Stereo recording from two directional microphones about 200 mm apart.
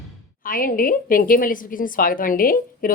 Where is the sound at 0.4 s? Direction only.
45° left (ahead or behind).